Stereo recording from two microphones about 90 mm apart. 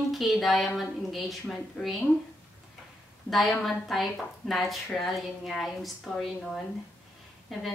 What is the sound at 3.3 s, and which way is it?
A woman's voice, centre (ahead or behind).